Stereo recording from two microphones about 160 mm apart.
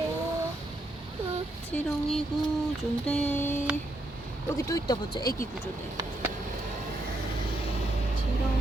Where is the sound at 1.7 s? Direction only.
5° left (ahead or behind).